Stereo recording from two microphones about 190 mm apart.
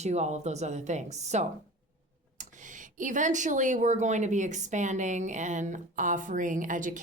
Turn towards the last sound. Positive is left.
turn(degrees=-45)  # may be behind; listen again after turning